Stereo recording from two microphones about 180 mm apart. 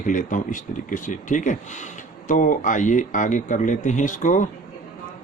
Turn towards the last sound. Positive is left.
turn(degrees=45)  # may be behind; listen again after turning